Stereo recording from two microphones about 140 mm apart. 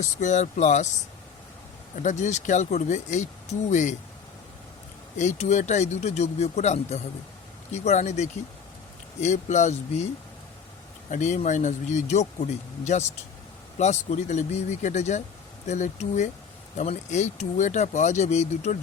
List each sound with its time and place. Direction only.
0.2 s speech: 60° left (ahead or behind)
2.0 s speech: 60° left (ahead or behind)
5.1 s speech: 55° left (ahead or behind)
11.1 s speech: 60° left (ahead or behind)